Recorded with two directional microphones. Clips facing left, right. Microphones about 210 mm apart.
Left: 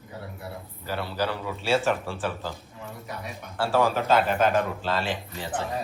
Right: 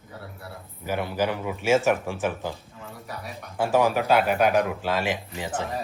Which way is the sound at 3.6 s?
15° right (ahead or behind).